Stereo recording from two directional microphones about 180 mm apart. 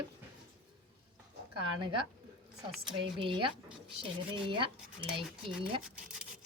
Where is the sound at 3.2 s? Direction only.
30° right (ahead or behind).